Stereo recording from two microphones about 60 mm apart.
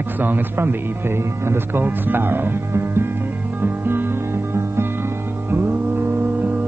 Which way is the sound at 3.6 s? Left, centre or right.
Right.